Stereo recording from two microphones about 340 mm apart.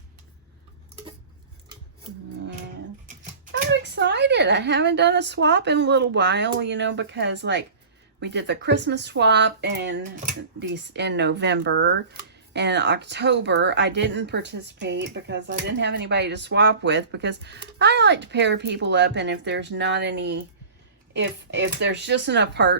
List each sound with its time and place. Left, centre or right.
3.7 s speech: right